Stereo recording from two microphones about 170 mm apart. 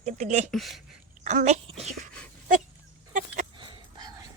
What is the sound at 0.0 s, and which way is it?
Speech, 45° right (ahead or behind).